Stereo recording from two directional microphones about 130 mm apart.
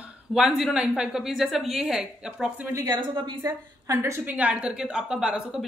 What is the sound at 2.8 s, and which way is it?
Speech, 35° right (ahead or behind).